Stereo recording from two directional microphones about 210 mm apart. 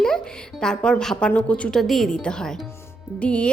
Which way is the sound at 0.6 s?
5° left (ahead or behind).